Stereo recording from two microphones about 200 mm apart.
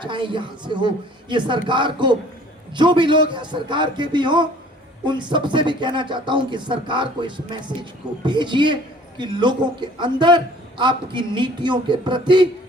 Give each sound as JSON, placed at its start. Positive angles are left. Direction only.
{"t": 0.0, "sound": "speech", "side_deg": -25}